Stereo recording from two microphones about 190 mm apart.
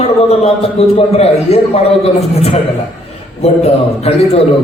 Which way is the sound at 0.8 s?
35° left (ahead or behind).